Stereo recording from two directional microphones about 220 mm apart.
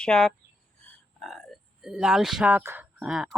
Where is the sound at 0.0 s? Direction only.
5° left (ahead or behind).